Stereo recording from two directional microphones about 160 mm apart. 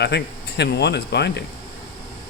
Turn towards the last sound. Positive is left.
turn(degrees=90)